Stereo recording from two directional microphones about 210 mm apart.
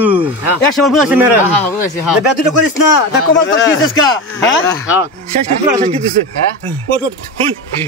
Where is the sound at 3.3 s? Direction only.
60° left (ahead or behind).